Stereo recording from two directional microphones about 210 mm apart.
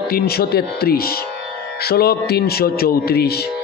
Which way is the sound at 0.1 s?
45° left (ahead or behind).